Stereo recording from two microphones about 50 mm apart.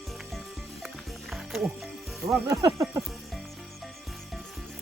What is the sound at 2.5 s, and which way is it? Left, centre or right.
Speech, right.